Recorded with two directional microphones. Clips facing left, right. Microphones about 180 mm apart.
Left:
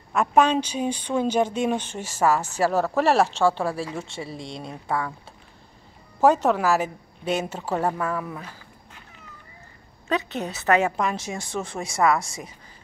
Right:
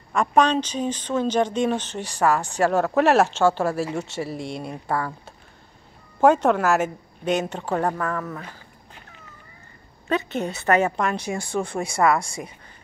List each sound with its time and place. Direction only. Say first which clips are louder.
0.1 s a woman's voice: even; 5° left (ahead or behind)
6.2 s a woman's voice: right 2 dB; centre (ahead or behind)
10.0 s a woman's voice: right 2 dB; centre (ahead or behind)